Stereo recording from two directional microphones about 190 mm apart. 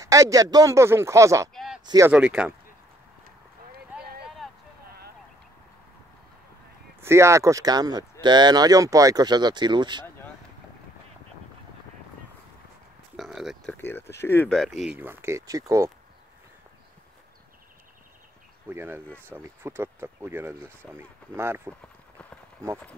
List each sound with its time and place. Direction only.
0.0 s speech: 15° right (ahead or behind)
1.5 s a sound: centre (ahead or behind)
1.9 s speech: 15° right (ahead or behind)
7.0 s speech: 15° right (ahead or behind)
13.1 s speech: centre (ahead or behind)
13.7 s speech: 10° left (ahead or behind); by 15.9 s 15° right (ahead or behind)
18.7 s speech: 10° right (ahead or behind)